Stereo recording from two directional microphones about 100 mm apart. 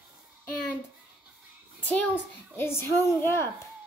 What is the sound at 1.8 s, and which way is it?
Speech, 15° left (ahead or behind).